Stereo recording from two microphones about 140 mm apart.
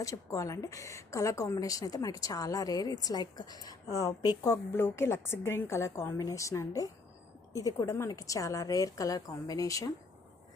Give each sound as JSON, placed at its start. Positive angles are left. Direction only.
{"t": 0.0, "sound": "a woman's voice", "side_deg": 25}